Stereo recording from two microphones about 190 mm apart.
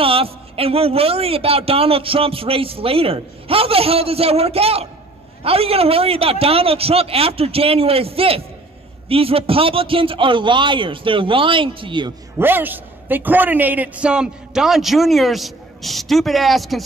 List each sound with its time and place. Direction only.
0.0 s a man's voice: 30° right (ahead or behind)
12.4 s a man's voice: 10° right (ahead or behind)